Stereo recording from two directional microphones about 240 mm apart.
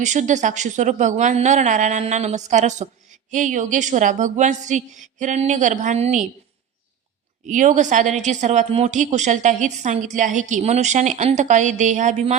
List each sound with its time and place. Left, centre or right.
0.0 s a woman's voice: right
7.4 s a woman's voice: right